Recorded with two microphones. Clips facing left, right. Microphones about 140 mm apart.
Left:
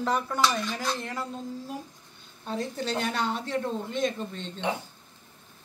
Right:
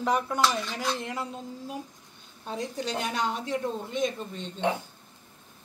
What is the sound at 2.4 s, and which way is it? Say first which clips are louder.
Speech: left 1 dB; 10° right (ahead or behind).